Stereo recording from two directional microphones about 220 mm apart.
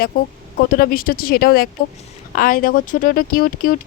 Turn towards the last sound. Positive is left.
turn(degrees=40)  # may be behind; listen again after turning